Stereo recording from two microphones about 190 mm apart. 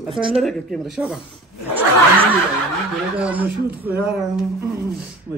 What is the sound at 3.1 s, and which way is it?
Speech, 10° right (ahead or behind).